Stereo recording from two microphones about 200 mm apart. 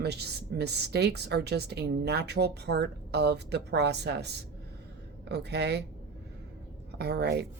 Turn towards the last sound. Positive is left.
turn(degrees=-55)  # may be behind; listen again after turning